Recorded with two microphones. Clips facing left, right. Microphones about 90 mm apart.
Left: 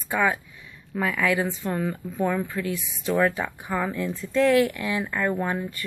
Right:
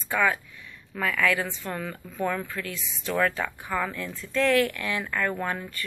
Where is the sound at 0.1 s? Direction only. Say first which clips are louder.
Left 1 dB; 20° left (ahead or behind).